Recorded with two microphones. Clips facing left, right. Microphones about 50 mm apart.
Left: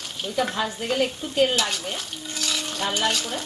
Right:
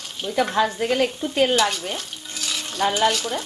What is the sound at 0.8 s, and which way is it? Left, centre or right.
Speech, right.